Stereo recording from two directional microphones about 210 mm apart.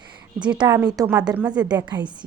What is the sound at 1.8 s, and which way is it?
Speech, 20° right (ahead or behind).